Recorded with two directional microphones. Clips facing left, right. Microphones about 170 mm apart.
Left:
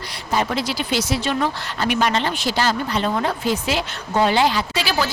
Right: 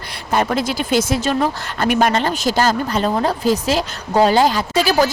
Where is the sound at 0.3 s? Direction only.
50° right (ahead or behind).